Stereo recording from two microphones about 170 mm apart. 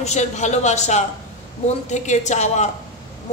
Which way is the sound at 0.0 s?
40° left (ahead or behind).